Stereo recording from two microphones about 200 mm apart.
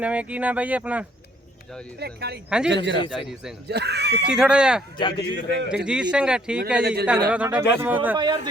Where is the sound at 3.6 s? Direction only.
55° right (ahead or behind).